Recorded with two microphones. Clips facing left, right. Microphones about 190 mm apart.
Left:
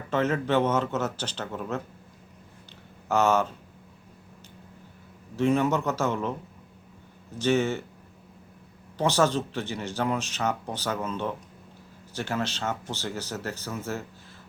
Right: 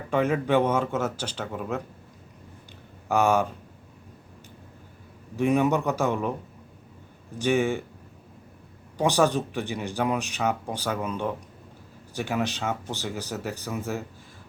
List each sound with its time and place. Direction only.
0.1 s speech: 10° right (ahead or behind)
3.1 s speech: 15° right (ahead or behind)
5.4 s speech: 15° right (ahead or behind)
7.3 s speech: 15° right (ahead or behind)
9.0 s speech: 15° right (ahead or behind)